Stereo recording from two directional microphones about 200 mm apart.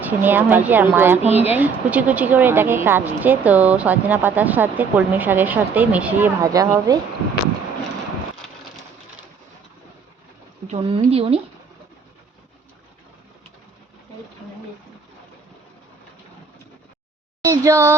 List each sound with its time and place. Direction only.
0.0 s speech: 10° right (ahead or behind)
10.7 s speech: 25° right (ahead or behind)
17.4 s speech: 15° right (ahead or behind)